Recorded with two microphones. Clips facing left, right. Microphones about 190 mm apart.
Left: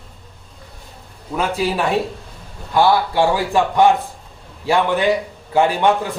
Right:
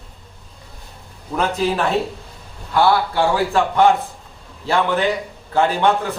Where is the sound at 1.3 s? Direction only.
10° left (ahead or behind).